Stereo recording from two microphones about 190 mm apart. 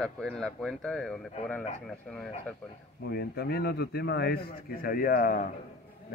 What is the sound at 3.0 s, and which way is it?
A man's voice, 55° left (ahead or behind).